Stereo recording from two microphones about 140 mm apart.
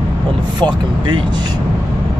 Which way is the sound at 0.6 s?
35° right (ahead or behind).